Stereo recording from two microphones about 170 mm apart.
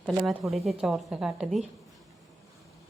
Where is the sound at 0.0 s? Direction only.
Centre (ahead or behind).